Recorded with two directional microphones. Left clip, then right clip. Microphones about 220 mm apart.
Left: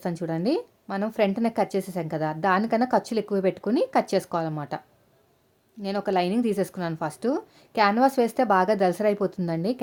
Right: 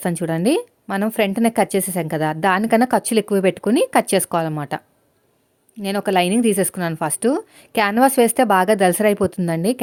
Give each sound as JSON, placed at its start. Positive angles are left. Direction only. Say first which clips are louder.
{"t": 0.0, "sound": "a woman's voice", "louder": "right 7 dB", "side_deg": -35}
{"t": 5.8, "sound": "a woman's voice", "louder": "right 7 dB", "side_deg": -30}